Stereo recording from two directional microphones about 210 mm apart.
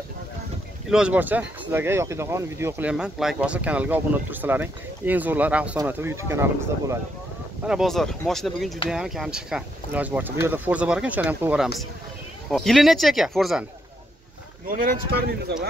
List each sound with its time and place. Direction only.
0.8 s speech: 5° right (ahead or behind)
7.6 s speech: centre (ahead or behind)
14.7 s speech: 45° right (ahead or behind)